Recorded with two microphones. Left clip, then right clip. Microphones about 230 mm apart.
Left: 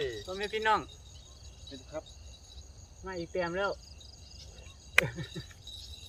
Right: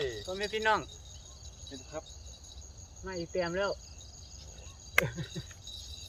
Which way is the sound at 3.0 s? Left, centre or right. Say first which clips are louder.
Even; centre.